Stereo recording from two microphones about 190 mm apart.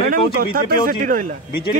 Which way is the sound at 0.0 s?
50° right (ahead or behind).